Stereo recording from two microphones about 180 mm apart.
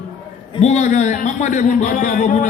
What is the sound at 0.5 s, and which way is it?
A man's voice, 40° left (ahead or behind).